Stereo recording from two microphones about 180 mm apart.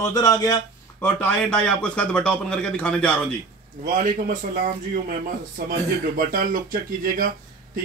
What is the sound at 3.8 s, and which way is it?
Speech, 50° right (ahead or behind).